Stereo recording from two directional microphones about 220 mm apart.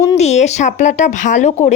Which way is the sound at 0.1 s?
30° left (ahead or behind).